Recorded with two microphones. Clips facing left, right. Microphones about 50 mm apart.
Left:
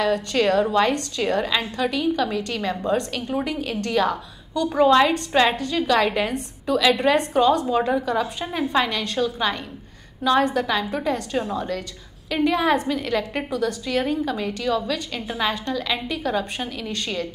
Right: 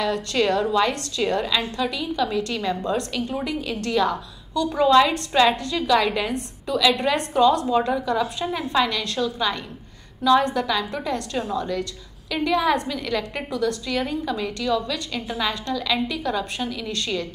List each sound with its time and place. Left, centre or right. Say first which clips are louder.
0.0 s a woman's voice: left 2 dB; centre
2.2 s a woman's voice: right 1 dB; centre; by 5.6 s left
5.6 s a woman's voice: left 2 dB; centre
5.9 s a woman's voice: even; left
6.3 s a woman's voice: left 2 dB; centre
6.8 s a woman's voice: left 2 dB; left
12.4 s a woman's voice: left 1 dB; left
13.2 s a woman's voice: left 1 dB; centre